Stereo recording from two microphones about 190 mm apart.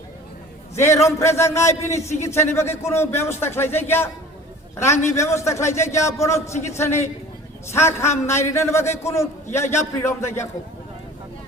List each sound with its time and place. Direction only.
1.0 s a man's voice: 15° left (ahead or behind)
2.0 s a man's voice: 35° left (ahead or behind)
2.2 s a man's voice: 15° left (ahead or behind)